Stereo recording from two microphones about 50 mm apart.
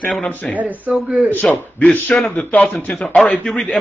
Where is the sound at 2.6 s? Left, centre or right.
Left.